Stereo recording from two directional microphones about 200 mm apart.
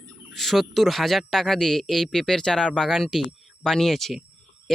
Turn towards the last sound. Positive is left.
turn(degrees=0)  # may be behind; listen again after turning